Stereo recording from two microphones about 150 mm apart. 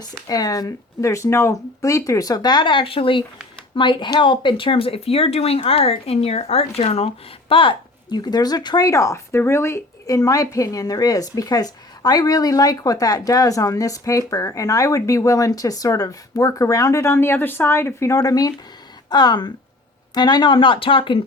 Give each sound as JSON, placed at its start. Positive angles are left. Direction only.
{"t": 0.0, "sound": "speech", "side_deg": 25}